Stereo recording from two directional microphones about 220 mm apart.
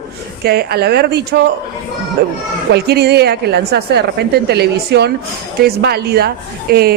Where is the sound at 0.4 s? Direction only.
45° right (ahead or behind).